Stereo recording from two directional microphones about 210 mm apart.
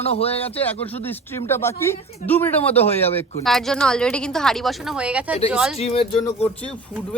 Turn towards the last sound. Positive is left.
turn(degrees=5)  # may be behind; listen again after turning